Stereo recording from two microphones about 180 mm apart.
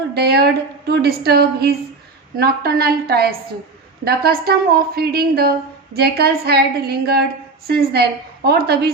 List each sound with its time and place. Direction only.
0.1 s speech: 65° right (ahead or behind)